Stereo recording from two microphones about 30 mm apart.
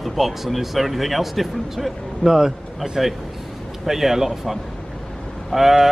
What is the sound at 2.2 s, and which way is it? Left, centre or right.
Speech, centre.